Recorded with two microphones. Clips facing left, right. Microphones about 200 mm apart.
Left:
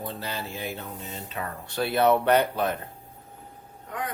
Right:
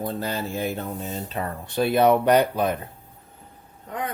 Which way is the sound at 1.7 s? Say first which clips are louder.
Right 3 dB; 20° right (ahead or behind).